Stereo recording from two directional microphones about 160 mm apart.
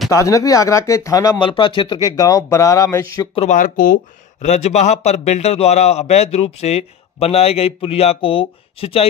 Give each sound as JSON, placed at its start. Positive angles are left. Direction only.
{"t": 0.1, "sound": "speech", "side_deg": 20}
{"t": 3.3, "sound": "speech", "side_deg": 50}